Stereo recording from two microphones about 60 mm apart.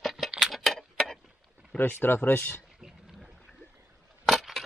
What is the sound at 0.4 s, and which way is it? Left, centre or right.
Tick-tock, centre.